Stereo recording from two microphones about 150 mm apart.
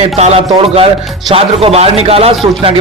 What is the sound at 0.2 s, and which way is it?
A man's voice, 40° right (ahead or behind).